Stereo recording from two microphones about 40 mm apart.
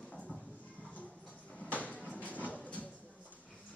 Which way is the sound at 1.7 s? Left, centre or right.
Left.